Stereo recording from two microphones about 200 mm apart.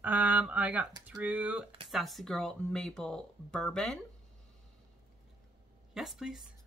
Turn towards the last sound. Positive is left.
turn(degrees=0)  # may be behind; listen again after turning